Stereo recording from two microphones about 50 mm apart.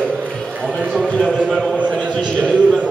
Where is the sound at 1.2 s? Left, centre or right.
Centre.